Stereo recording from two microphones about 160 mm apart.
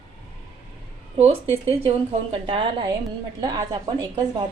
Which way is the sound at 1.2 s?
40° right (ahead or behind).